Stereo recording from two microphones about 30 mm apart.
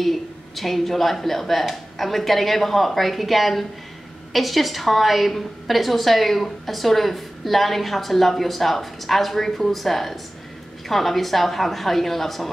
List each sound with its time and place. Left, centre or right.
0.0 s a woman's voice: centre